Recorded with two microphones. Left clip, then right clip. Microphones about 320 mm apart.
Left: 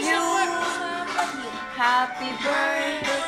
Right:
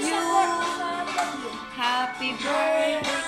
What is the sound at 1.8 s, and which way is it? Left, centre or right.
Music, centre.